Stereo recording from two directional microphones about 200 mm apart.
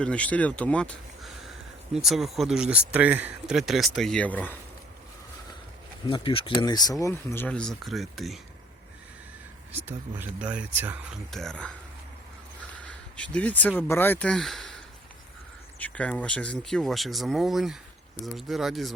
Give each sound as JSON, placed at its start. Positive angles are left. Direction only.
{"t": 0.0, "sound": "speech", "side_deg": 5}
{"t": 6.1, "sound": "speech", "side_deg": 25}
{"t": 9.7, "sound": "speech", "side_deg": -10}
{"t": 12.8, "sound": "speech", "side_deg": 5}
{"t": 15.8, "sound": "speech", "side_deg": 5}